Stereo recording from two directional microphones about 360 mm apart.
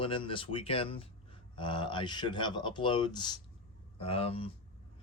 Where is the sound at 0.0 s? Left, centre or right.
Centre.